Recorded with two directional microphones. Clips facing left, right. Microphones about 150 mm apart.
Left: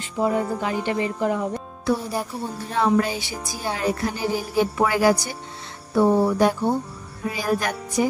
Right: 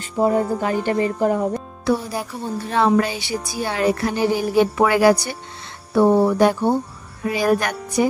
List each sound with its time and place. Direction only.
0.0 s a woman's voice: 40° right (ahead or behind)
1.9 s speech: 70° right (ahead or behind)